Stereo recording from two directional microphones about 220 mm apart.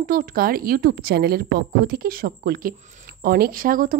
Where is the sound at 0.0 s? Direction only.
40° right (ahead or behind).